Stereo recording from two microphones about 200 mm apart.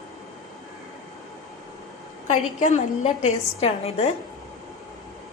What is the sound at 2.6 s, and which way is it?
Dishes, 35° left (ahead or behind).